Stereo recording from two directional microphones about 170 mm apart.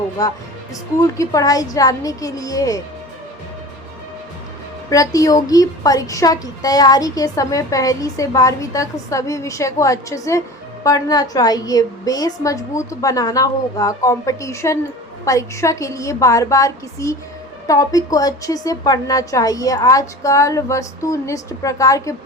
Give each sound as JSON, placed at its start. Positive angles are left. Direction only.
{"t": 0.2, "sound": "a woman's voice", "side_deg": 20}
{"t": 4.9, "sound": "a woman's voice", "side_deg": 20}